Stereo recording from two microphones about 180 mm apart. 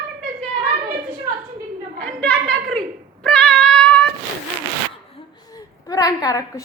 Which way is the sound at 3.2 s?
5° left (ahead or behind).